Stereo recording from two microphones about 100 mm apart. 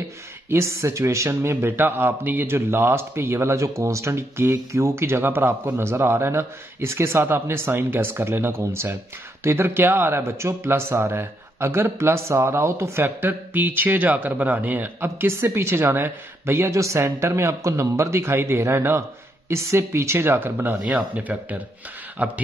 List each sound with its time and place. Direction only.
0.5 s speech: 25° right (ahead or behind)